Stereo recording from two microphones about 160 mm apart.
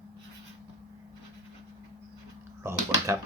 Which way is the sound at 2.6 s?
15° right (ahead or behind).